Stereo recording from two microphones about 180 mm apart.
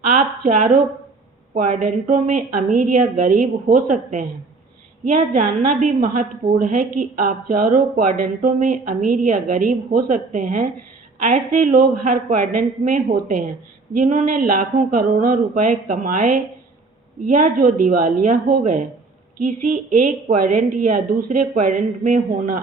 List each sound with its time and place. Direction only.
0.0 s a woman's voice: 45° right (ahead or behind)